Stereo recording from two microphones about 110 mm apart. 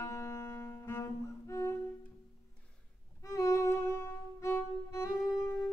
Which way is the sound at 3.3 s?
30° left (ahead or behind).